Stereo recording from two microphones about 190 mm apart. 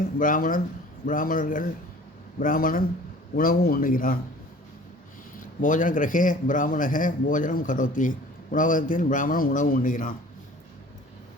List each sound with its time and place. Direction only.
0.0 s a man's voice: 45° left (ahead or behind)
5.5 s a man's voice: 45° left (ahead or behind)